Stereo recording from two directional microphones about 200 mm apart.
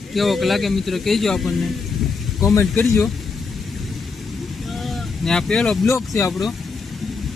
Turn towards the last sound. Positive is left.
turn(degrees=15)  # may be behind; listen again after turning